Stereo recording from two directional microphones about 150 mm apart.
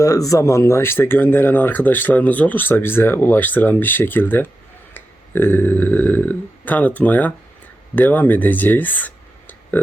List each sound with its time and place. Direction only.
0.0 s speech: 20° left (ahead or behind)